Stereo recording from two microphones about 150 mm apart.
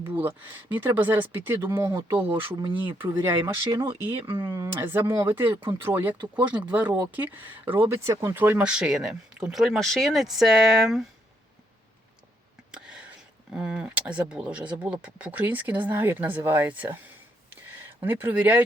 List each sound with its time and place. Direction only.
0.0 s speech: 15° right (ahead or behind)
3.7 s speech: 30° right (ahead or behind)
4.4 s speech: 20° right (ahead or behind); by 11.0 s 5° right (ahead or behind)
12.7 s speech: 5° right (ahead or behind)
18.0 s speech: 15° right (ahead or behind)